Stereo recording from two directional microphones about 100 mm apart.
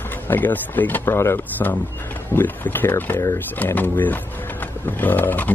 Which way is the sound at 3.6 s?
20° left (ahead or behind).